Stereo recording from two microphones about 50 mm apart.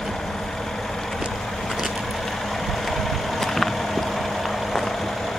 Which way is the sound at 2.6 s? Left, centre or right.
Centre.